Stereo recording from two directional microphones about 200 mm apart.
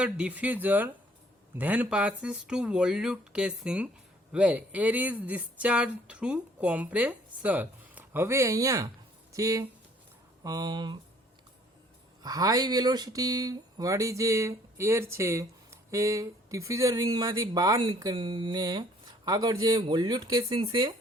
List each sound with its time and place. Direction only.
0.0 s speech: 5° right (ahead or behind); by 11.0 s 20° right (ahead or behind)
12.2 s speech: 20° right (ahead or behind)